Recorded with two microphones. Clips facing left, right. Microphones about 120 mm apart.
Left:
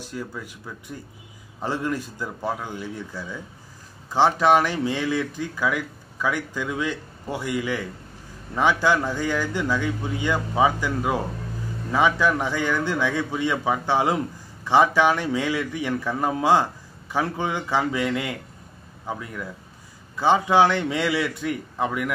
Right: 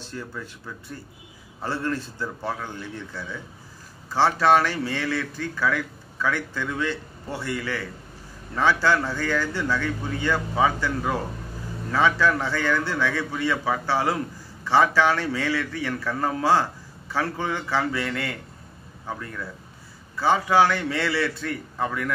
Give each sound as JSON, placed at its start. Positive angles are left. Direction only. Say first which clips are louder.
{"t": 0.0, "sound": "a man's voice", "louder": "left 2 dB", "side_deg": 10}